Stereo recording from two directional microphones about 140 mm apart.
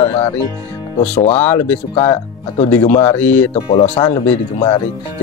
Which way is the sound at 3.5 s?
45° left (ahead or behind).